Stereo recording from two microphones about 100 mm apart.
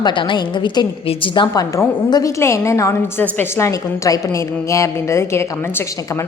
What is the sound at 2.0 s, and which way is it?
Speech, 45° left (ahead or behind).